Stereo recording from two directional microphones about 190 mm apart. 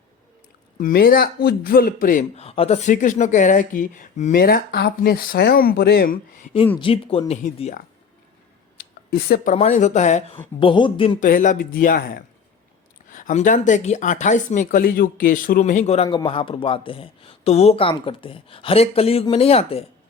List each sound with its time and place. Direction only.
0.8 s a man's voice: 45° left (ahead or behind)
6.7 s speech: 30° left (ahead or behind)
8.8 s speech: 55° left (ahead or behind); by 10.3 s 35° left (ahead or behind)
10.6 s speech: 25° left (ahead or behind)
11.2 s a man's voice: 45° left (ahead or behind)
16.0 s speech: 25° left (ahead or behind)